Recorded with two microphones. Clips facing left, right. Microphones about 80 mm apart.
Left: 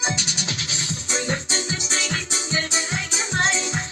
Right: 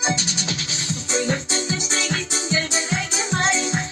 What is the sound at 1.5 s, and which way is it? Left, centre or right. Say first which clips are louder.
Music: right 2 dB; right.